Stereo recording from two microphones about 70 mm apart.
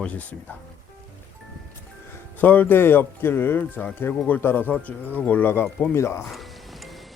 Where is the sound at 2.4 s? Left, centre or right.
Left.